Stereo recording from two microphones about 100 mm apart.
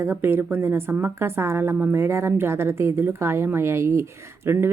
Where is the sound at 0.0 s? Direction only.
25° right (ahead or behind).